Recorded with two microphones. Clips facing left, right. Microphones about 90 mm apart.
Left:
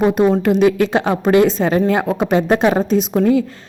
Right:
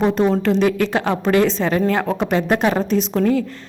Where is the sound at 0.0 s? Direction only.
15° left (ahead or behind).